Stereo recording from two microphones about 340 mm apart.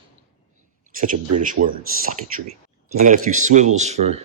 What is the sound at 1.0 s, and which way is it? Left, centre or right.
Speech, right.